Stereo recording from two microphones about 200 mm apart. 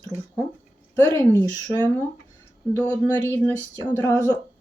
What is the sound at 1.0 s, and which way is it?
Speech, 15° left (ahead or behind).